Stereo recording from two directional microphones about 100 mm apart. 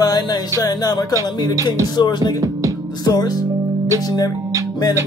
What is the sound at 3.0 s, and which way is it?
Speech, 40° left (ahead or behind).